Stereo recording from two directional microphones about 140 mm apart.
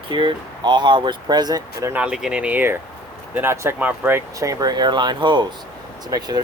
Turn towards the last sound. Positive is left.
turn(degrees=-30)  # may be behind; listen again after turning